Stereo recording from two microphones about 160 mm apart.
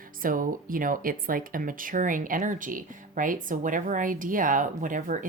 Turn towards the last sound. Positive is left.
turn(degrees=-55)  # may be behind; listen again after turning